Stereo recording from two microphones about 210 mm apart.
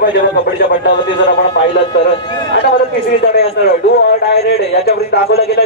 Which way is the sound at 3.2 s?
45° left (ahead or behind).